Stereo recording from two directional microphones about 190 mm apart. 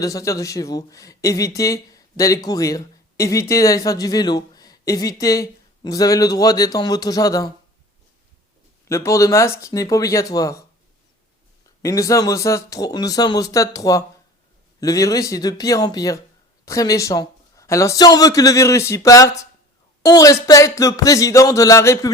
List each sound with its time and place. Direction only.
0.0 s speech: 15° left (ahead or behind)
8.9 s speech: 15° left (ahead or behind)
11.8 s speech: 15° left (ahead or behind)